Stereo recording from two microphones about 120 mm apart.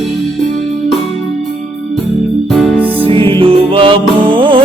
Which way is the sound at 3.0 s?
45° right (ahead or behind).